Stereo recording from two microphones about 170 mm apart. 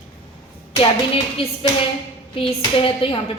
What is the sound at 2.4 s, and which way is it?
Speech, 30° left (ahead or behind).